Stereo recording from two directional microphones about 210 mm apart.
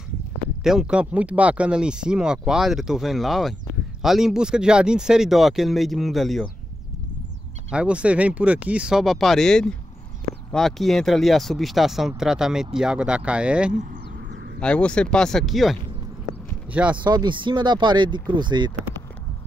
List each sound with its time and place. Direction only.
0.7 s speech: 5° right (ahead or behind)
7.7 s speech: 5° right (ahead or behind)
14.6 s speech: 5° left (ahead or behind)
17.0 s speech: 20° right (ahead or behind)